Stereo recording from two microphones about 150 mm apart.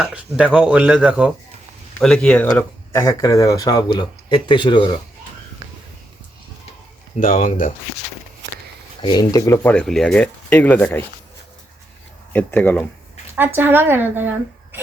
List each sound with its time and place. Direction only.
0.0 s a man's voice: 5° right (ahead or behind)
2.0 s speech: 5° left (ahead or behind)
2.6 s speech: 20° left (ahead or behind)
7.2 s speech: 60° left (ahead or behind)
9.0 s speech: 30° left (ahead or behind)
9.6 s speech: 5° left (ahead or behind)
12.3 s speech: 10° left (ahead or behind)
13.3 s a man's voice: 15° right (ahead or behind)